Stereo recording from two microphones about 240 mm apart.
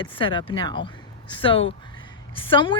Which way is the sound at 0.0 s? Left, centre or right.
Left.